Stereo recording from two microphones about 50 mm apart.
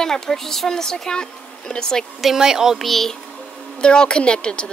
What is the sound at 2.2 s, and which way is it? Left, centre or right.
Speech, centre.